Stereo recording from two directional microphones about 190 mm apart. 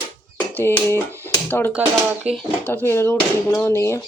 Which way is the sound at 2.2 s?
Centre (ahead or behind).